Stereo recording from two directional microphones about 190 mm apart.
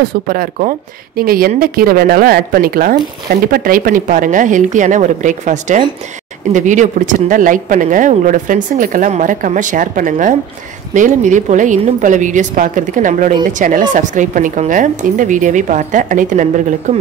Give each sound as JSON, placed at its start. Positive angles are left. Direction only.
{"t": 0.3, "sound": "a woman's voice", "side_deg": -45}